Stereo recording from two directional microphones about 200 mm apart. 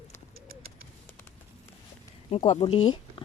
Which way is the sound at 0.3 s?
45° right (ahead or behind).